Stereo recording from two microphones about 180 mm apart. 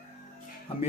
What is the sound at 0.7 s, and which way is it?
Speech, 30° left (ahead or behind).